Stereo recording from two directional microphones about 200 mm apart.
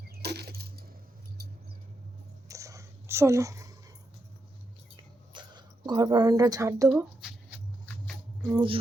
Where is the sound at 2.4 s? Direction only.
15° right (ahead or behind).